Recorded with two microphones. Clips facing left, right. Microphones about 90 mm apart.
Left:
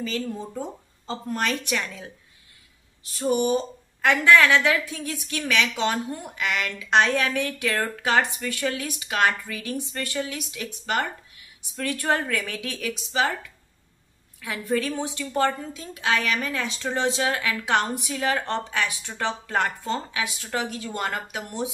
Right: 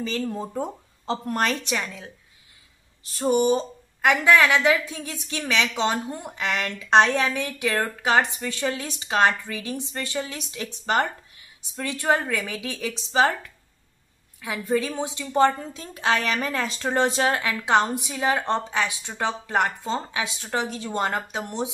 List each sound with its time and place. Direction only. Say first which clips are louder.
0.0 s speech: right 2 dB; 35° right (ahead or behind)
1.6 s speech: even; 20° right (ahead or behind)
3.0 s speech: right 2 dB; 40° right (ahead or behind)
3.5 s speech: left 1 dB; 15° right (ahead or behind); by 7.2 s 30° right (ahead or behind)
7.2 s speech: even; 20° right (ahead or behind)
11.7 s speech: right 2 dB; 20° right (ahead or behind)
12.9 s speech: right 5 dB; 35° right (ahead or behind)
14.4 s speech: right 1 dB; 20° right (ahead or behind)
15.7 s speech: right 1 dB; 40° right (ahead or behind)
17.4 s speech: right 3 dB; 25° right (ahead or behind)